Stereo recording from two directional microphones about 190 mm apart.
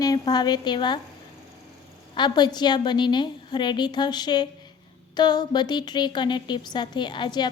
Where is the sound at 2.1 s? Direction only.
25° left (ahead or behind).